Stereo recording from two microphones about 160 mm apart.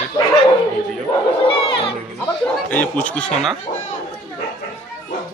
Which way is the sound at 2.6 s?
10° left (ahead or behind).